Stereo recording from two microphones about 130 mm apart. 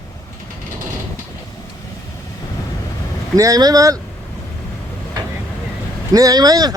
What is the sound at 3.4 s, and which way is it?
Speech, 30° right (ahead or behind).